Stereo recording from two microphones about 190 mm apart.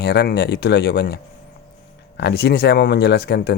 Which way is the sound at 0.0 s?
60° left (ahead or behind).